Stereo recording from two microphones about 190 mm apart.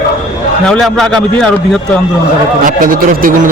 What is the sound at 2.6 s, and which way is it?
Speech, 45° right (ahead or behind).